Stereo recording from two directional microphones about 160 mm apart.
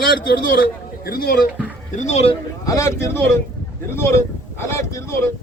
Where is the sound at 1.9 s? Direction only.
45° left (ahead or behind).